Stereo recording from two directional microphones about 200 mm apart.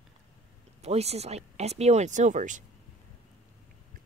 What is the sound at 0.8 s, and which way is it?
Speech, 30° right (ahead or behind).